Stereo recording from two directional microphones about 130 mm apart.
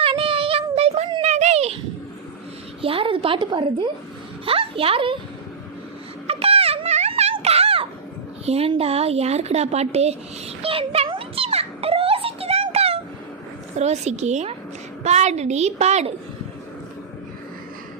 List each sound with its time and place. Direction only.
0.0 s child singing: 45° right (ahead or behind)
1.2 s a sound: 60° right (ahead or behind)
2.8 s speech: 45° right (ahead or behind)
6.2 s music: 50° right (ahead or behind)
8.4 s speech: 50° right (ahead or behind)
10.6 s a sound: 45° right (ahead or behind)
13.7 s a woman's voice: 60° right (ahead or behind)